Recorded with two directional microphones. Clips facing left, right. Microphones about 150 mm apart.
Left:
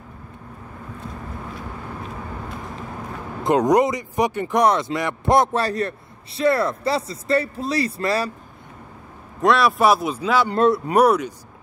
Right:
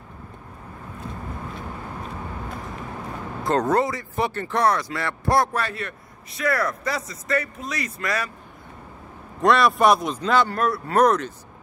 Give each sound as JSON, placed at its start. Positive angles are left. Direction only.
{"t": 3.4, "sound": "speech", "side_deg": 15}
{"t": 5.6, "sound": "a man's voice", "side_deg": 35}
{"t": 9.4, "sound": "speech", "side_deg": 0}
{"t": 10.5, "sound": "a man's voice", "side_deg": 20}
{"t": 11.0, "sound": "speech", "side_deg": 10}